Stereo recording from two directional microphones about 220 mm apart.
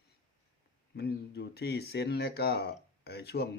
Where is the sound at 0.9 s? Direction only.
50° left (ahead or behind).